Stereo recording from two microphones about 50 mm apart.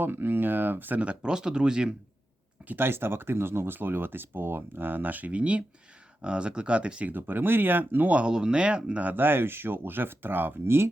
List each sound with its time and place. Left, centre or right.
0.0 s speech: right
1.0 s speech: right
2.7 s speech: right
7.1 s speech: right
8.1 s speech: centre
9.1 s speech: right